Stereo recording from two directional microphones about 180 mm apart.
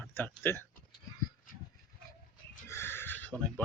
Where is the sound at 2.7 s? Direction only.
15° left (ahead or behind).